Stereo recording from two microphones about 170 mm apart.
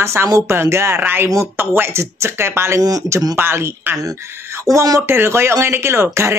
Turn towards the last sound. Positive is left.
turn(degrees=-15)  # may be behind; listen again after turning